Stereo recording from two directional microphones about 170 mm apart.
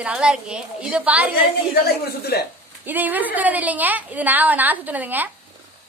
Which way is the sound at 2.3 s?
70° left (ahead or behind).